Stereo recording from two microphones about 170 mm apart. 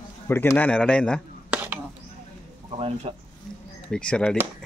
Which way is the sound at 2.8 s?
35° right (ahead or behind).